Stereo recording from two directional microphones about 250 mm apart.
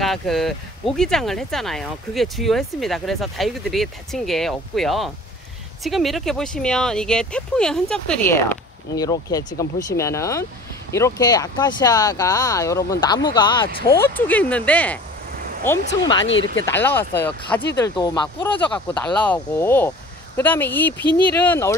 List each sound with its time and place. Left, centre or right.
0.0 s speech: centre
13.9 s speech: centre
16.3 s speech: left
16.6 s speech: centre